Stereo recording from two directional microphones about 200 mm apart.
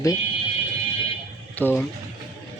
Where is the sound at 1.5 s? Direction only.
10° left (ahead or behind).